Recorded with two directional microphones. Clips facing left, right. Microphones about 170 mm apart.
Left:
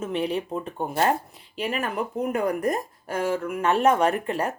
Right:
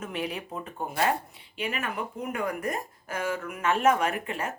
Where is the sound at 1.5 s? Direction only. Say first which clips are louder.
Left 5 dB; 35° left (ahead or behind).